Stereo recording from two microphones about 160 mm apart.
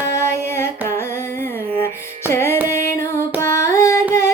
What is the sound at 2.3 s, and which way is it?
Music, 15° left (ahead or behind).